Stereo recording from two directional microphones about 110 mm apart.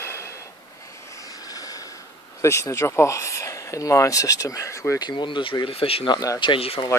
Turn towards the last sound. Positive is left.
turn(degrees=55)  # may be behind; listen again after turning